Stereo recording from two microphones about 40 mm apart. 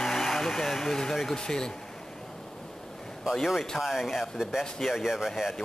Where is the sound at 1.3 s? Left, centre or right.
Centre.